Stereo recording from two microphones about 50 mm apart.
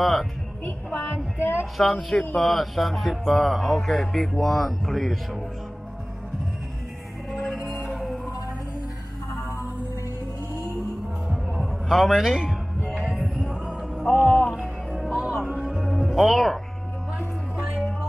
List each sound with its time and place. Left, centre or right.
0.0 s speech: centre
0.9 s music: left
1.8 s speech: centre
7.2 s music: centre
7.9 s music: centre
11.6 s speech: centre
13.7 s a sound: centre
14.1 s music: left
14.5 s music: centre